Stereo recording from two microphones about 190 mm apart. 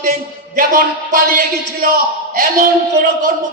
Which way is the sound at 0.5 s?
45° right (ahead or behind).